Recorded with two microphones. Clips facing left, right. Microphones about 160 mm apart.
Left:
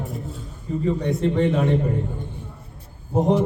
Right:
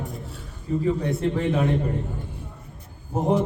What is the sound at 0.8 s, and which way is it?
Speech, centre (ahead or behind).